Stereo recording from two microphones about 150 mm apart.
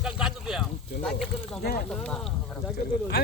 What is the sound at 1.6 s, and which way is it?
Speech, 90° left.